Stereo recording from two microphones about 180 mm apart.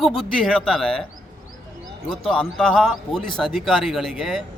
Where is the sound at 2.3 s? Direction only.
5° left (ahead or behind).